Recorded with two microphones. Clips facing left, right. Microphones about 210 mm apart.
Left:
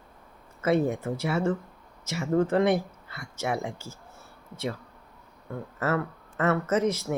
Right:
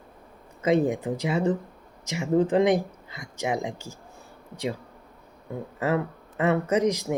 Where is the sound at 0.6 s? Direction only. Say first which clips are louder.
Right 2 dB; 15° right (ahead or behind).